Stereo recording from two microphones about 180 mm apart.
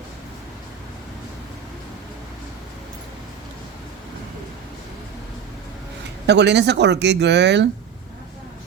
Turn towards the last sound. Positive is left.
turn(degrees=-70)  # may be behind; listen again after turning